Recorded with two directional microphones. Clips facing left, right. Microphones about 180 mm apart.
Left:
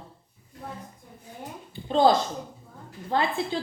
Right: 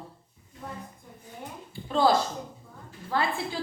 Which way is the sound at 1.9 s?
20° left (ahead or behind).